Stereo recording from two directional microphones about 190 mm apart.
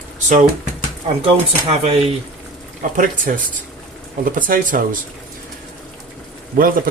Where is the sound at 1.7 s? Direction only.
30° right (ahead or behind).